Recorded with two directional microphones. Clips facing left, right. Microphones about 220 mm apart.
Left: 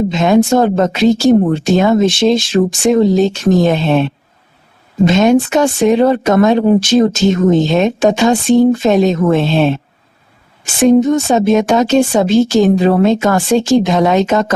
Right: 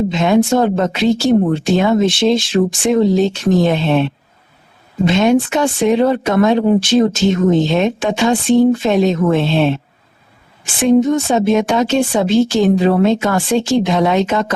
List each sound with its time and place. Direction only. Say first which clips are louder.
0.1 s speech: left 4 dB; 45° left (ahead or behind)